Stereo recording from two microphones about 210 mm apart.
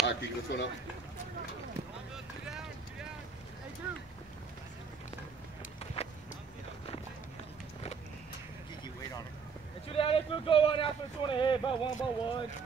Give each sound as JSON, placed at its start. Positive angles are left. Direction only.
{"t": 0.0, "sound": "speech", "side_deg": 55}
{"t": 2.1, "sound": "boat", "side_deg": -5}
{"t": 9.8, "sound": "speech", "side_deg": 25}